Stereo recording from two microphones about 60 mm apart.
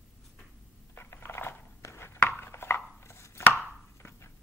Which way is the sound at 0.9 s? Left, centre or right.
Left.